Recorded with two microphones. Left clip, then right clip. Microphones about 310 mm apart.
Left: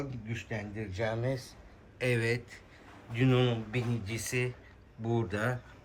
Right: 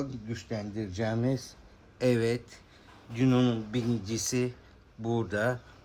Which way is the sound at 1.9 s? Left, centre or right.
Centre.